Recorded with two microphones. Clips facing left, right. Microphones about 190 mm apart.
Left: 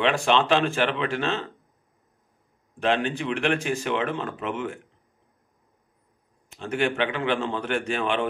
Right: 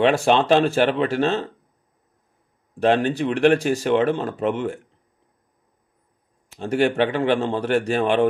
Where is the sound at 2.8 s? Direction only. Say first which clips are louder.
Right 6 dB; 40° right (ahead or behind).